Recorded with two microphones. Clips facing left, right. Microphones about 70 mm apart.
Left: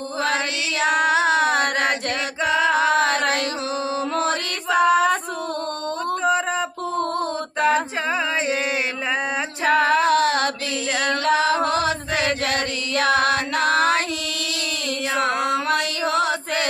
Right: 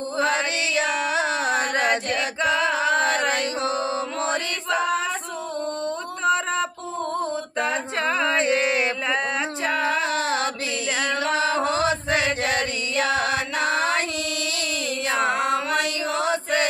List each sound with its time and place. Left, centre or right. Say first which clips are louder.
0.8 s a sound: left 10 dB; left
2.7 s chant: left 3 dB; left
4.7 s female singing: left 8 dB; left
7.0 s a sound: left 1 dB; left
9.7 s female singing: left 8 dB; left
12.9 s music: left 4 dB; left